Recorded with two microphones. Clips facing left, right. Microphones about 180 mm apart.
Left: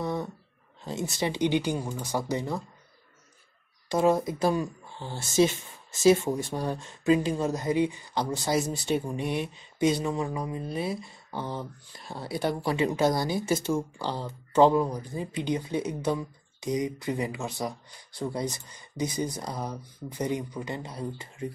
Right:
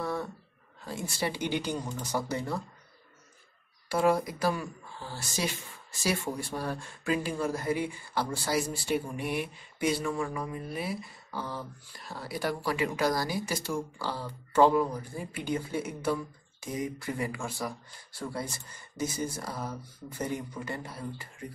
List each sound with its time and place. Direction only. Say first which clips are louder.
0.0 s a sound: left 2 dB; 20° left (ahead or behind)
0.8 s speech: left 3 dB; 20° left (ahead or behind)
3.9 s speech: left 3 dB; 20° left (ahead or behind)